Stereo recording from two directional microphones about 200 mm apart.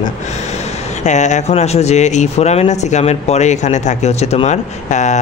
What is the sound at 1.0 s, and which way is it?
Speech, 35° left (ahead or behind).